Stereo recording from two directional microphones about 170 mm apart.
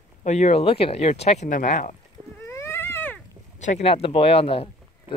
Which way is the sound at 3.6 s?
40° left (ahead or behind).